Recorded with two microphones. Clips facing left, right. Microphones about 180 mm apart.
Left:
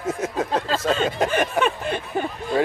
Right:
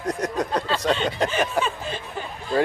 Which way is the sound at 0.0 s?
5° left (ahead or behind).